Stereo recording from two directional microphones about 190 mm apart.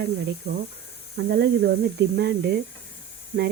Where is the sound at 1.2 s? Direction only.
60° right (ahead or behind).